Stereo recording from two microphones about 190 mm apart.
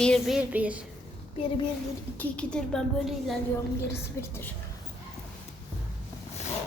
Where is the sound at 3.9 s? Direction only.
15° left (ahead or behind).